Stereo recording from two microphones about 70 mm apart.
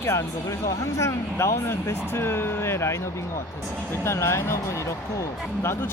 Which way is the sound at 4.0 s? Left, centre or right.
Left.